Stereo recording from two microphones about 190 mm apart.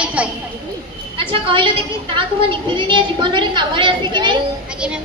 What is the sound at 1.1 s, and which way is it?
A woman's voice, 25° right (ahead or behind).